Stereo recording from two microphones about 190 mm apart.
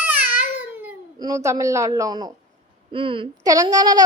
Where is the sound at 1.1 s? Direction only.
20° right (ahead or behind).